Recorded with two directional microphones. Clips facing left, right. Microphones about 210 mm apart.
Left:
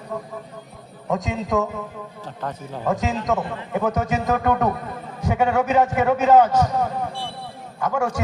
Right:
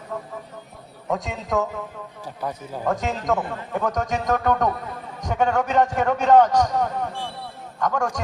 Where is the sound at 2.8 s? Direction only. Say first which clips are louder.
Left 1 dB; centre (ahead or behind).